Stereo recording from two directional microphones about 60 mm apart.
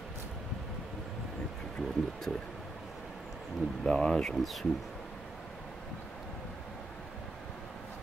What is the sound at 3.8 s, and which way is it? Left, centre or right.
Speech, centre.